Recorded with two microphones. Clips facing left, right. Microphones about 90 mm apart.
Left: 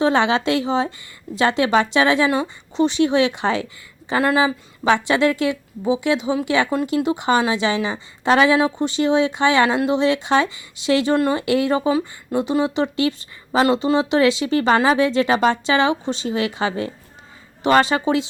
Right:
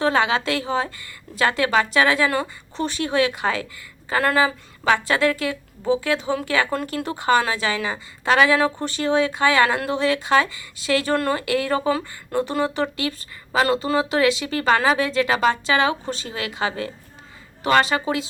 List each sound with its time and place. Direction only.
0.0 s a woman's voice: 25° left (ahead or behind)